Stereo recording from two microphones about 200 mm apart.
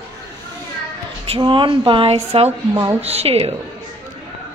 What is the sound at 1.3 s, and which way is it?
A woman's voice, 25° right (ahead or behind).